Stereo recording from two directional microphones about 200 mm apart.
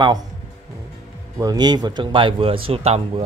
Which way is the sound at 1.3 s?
20° right (ahead or behind).